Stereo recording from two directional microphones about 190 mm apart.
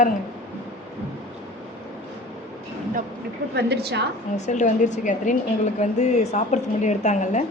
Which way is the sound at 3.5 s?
60° right (ahead or behind).